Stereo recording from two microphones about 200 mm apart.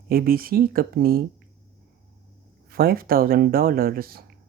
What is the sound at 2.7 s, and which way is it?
Speech, 50° right (ahead or behind).